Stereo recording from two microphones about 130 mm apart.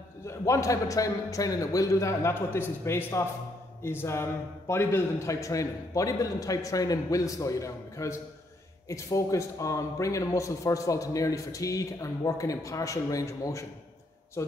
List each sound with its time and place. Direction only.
0.3 s a man's voice: 25° left (ahead or behind)